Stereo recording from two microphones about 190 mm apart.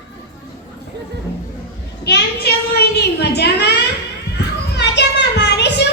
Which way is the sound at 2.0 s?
60° left (ahead or behind).